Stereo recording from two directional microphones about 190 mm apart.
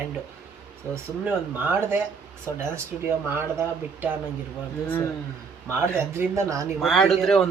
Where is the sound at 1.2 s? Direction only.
10° right (ahead or behind).